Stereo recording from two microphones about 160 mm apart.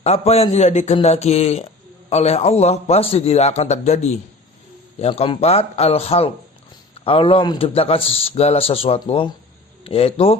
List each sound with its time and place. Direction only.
0.0 s a man's voice: 40° left (ahead or behind)